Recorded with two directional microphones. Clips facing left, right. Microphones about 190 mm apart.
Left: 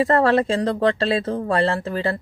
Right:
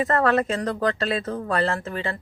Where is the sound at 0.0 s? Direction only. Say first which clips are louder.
Left 4 dB; 30° left (ahead or behind).